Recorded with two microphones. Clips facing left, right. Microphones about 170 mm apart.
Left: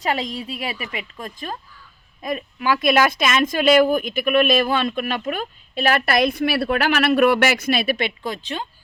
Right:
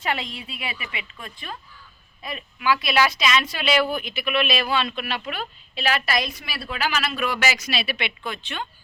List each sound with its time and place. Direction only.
0.0 s speech: 40° left (ahead or behind)